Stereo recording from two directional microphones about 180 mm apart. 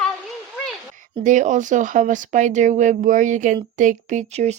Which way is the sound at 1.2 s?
45° right (ahead or behind).